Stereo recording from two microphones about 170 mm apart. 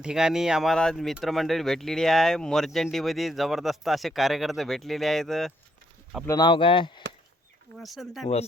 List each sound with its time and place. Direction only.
0.0 s speech: 5° right (ahead or behind)
6.2 s speech: 25° left (ahead or behind)
7.8 s speech: centre (ahead or behind)